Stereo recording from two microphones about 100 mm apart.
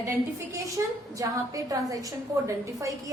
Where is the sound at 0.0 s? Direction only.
30° right (ahead or behind).